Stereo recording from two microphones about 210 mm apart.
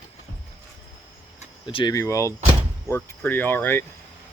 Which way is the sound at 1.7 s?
25° left (ahead or behind).